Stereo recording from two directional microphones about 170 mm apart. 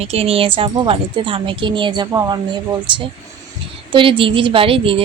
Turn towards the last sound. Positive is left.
turn(degrees=-30)  # may be behind; listen again after turning